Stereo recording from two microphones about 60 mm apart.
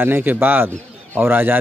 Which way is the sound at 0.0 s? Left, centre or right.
Right.